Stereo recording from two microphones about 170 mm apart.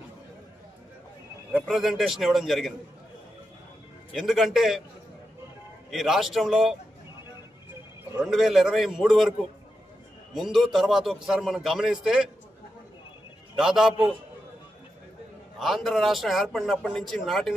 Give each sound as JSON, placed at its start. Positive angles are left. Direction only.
{"t": 1.5, "sound": "a man's voice", "side_deg": 0}
{"t": 4.1, "sound": "a man's voice", "side_deg": 0}
{"t": 5.9, "sound": "a man's voice", "side_deg": 0}
{"t": 8.2, "sound": "a man's voice", "side_deg": 0}
{"t": 10.5, "sound": "a man's voice", "side_deg": 0}
{"t": 13.6, "sound": "a man's voice", "side_deg": 0}
{"t": 15.6, "sound": "a man's voice", "side_deg": 0}